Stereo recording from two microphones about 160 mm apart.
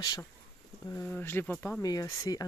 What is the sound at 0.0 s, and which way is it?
Speech, 25° left (ahead or behind).